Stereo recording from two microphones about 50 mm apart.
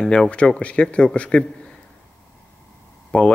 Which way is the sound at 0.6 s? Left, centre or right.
Left.